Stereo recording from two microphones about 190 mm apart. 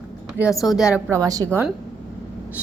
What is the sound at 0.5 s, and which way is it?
Speech, centre (ahead or behind).